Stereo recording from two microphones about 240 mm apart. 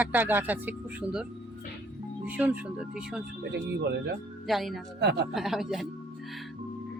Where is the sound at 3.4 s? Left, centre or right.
Right.